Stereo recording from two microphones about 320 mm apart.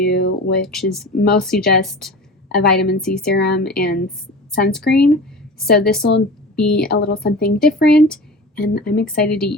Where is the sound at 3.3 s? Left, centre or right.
Left.